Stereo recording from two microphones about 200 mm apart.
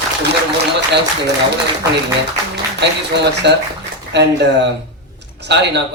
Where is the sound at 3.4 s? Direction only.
55° right (ahead or behind).